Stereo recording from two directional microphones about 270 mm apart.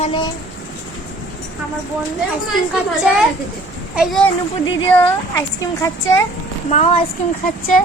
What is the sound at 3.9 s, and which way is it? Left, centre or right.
A child's voice, centre.